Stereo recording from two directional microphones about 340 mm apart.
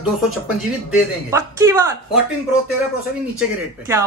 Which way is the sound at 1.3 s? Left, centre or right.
Centre.